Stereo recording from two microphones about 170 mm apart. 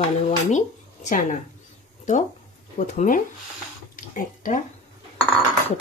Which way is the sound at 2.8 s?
50° left (ahead or behind).